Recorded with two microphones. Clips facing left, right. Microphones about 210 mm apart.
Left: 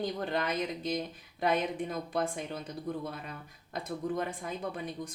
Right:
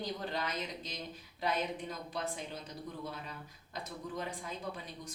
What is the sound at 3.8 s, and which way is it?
Speech, 55° left (ahead or behind).